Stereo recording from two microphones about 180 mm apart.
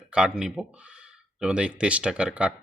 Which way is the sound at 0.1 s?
5° right (ahead or behind).